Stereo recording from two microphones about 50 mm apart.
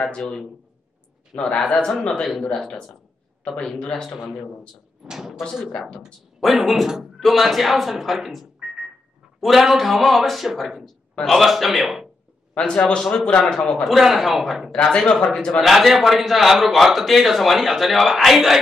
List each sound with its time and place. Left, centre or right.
1.3 s a man's voice: centre
1.9 s a man's voice: centre
5.0 s speech: centre
5.9 s speech: centre
6.4 s a man's voice: centre
12.5 s a man's voice: centre
13.8 s a man's voice: centre
14.7 s a man's voice: centre
15.6 s a man's voice: centre